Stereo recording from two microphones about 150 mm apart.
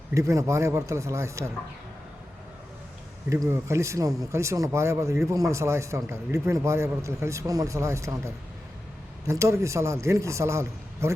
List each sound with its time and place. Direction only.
0.1 s speech: 20° right (ahead or behind)
3.4 s speech: 20° right (ahead or behind)